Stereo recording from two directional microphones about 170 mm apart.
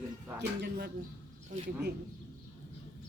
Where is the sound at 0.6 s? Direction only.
80° right.